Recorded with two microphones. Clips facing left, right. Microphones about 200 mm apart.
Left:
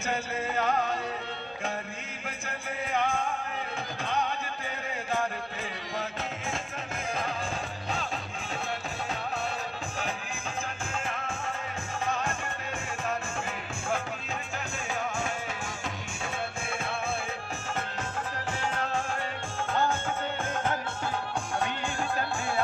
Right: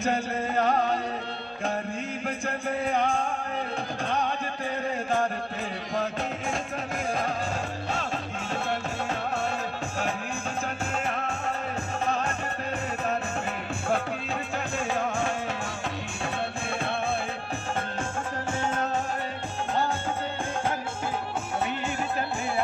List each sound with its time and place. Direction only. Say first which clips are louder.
0.1 s music: right 4 dB; 35° right (ahead or behind)
4.0 s music: right 2 dB; 35° right (ahead or behind)
10.9 s music: right 5 dB; 40° right (ahead or behind)